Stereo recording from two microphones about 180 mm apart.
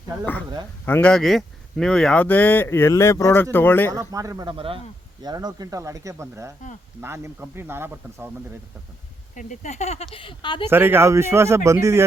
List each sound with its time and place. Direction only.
0.9 s speech: 10° left (ahead or behind)
4.1 s speech: 20° right (ahead or behind)
9.3 s speech: 45° left (ahead or behind); by 10.7 s 25° left (ahead or behind)
10.7 s speech: 10° right (ahead or behind)